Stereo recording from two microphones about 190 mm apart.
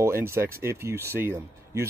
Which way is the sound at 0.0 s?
15° right (ahead or behind).